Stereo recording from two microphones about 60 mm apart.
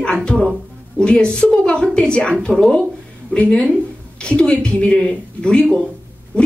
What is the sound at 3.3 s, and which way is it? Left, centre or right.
Speech, left.